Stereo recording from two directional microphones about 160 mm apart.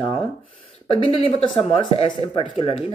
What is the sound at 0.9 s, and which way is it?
Speech, 35° left (ahead or behind).